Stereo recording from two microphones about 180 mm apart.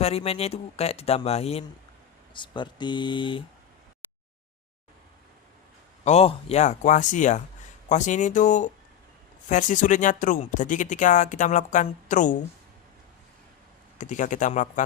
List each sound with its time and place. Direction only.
0.0 s speech: 35° left (ahead or behind)
6.1 s speech: 35° left (ahead or behind)
14.0 s speech: 45° left (ahead or behind)